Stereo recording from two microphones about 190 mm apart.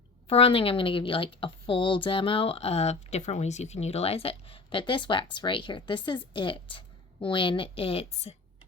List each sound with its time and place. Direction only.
0.3 s a woman's voice: 30° left (ahead or behind)